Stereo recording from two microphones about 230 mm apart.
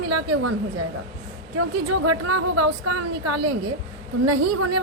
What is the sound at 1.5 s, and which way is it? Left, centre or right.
A woman's voice, right.